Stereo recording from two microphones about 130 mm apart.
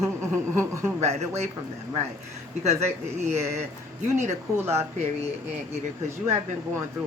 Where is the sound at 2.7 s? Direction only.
60° right (ahead or behind).